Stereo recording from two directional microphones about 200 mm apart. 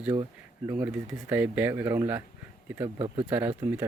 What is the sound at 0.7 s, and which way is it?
Speech, 10° right (ahead or behind).